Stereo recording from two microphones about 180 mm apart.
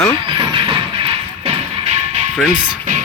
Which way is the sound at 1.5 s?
35° right (ahead or behind).